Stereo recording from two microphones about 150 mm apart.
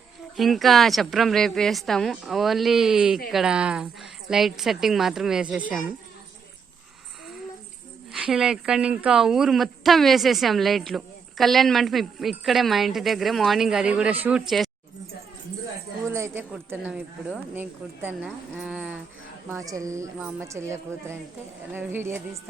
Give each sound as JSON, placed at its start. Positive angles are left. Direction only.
{"t": 0.3, "sound": "a woman's voice", "side_deg": 0}
{"t": 8.1, "sound": "a woman's voice", "side_deg": -5}
{"t": 16.0, "sound": "speech", "side_deg": -20}
{"t": 19.5, "sound": "speech", "side_deg": -20}